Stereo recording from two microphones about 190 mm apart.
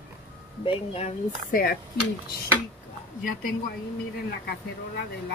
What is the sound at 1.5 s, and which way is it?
Speech, 50° left (ahead or behind).